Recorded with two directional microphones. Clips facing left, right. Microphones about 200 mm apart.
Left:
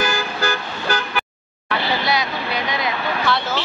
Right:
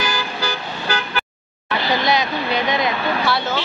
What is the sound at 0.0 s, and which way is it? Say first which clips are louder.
Car: left 2 dB; 50° left (ahead or behind).